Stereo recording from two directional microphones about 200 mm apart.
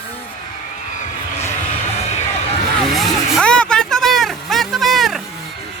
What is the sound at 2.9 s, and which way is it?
Vehicle, centre (ahead or behind).